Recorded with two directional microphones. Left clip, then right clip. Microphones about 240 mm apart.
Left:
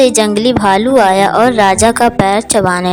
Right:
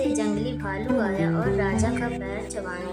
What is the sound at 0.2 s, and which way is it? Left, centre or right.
A woman's voice, left.